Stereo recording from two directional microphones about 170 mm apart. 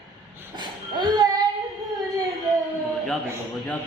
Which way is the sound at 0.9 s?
25° right (ahead or behind).